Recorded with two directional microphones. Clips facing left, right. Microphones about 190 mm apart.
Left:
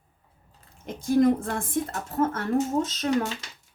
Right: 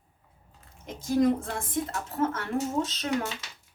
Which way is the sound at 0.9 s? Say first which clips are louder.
Left 3 dB; 55° left (ahead or behind).